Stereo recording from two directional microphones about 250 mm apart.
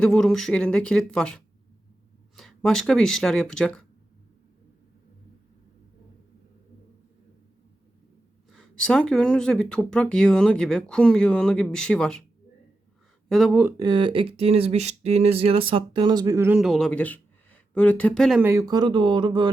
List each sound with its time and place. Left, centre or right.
0.0 s speech: centre
8.4 s speech: centre
13.2 s speech: centre